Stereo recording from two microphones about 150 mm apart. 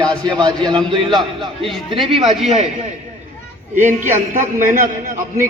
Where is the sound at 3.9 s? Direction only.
55° right (ahead or behind).